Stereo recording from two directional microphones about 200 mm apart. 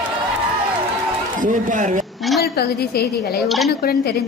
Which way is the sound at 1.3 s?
40° right (ahead or behind).